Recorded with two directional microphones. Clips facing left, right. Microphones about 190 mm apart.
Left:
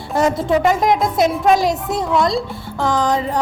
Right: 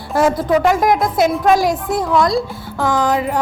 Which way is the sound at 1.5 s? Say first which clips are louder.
Right 1 dB; 20° left (ahead or behind).